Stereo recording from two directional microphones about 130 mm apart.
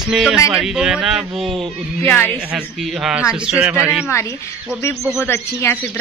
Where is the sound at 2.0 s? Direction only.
15° left (ahead or behind).